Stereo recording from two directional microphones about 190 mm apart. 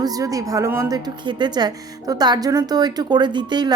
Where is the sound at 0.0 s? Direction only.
20° right (ahead or behind).